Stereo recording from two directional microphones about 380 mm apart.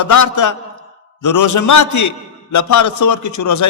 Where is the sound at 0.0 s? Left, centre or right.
Left.